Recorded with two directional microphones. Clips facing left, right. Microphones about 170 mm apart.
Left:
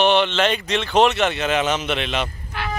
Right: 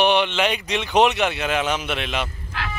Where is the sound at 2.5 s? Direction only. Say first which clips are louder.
Left 2 dB; 90° right.